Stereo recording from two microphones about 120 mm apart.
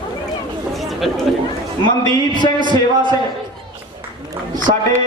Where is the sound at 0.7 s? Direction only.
Centre (ahead or behind).